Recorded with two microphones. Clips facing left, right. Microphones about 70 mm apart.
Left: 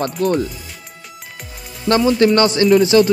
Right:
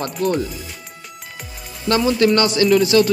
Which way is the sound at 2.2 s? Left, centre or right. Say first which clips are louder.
Left 2 dB; left.